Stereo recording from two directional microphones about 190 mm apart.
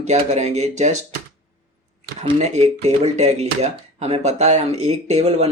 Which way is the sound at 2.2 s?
35° right (ahead or behind).